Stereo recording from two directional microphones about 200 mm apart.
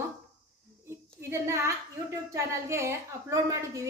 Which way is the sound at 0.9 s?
15° right (ahead or behind).